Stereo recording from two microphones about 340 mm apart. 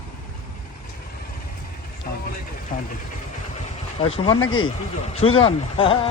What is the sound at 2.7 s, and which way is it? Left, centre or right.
Vehicle, left.